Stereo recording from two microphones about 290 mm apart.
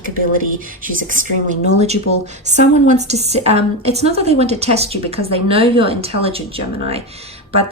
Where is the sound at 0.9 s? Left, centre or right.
Right.